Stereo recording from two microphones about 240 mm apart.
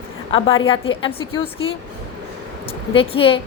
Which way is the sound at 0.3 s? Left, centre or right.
Left.